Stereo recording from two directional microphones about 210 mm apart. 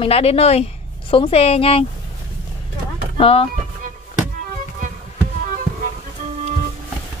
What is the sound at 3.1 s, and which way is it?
Speech, 25° left (ahead or behind).